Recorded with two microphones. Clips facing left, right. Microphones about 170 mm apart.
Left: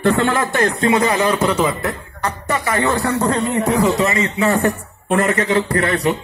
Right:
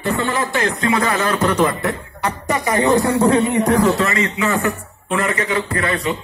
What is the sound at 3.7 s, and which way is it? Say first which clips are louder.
Speech: even; 10° left (ahead or behind).